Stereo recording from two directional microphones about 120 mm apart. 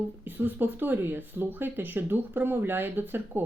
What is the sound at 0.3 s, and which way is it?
Speech, 15° right (ahead or behind).